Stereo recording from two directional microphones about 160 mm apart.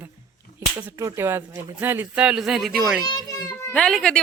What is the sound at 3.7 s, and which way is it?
Speech, 5° left (ahead or behind).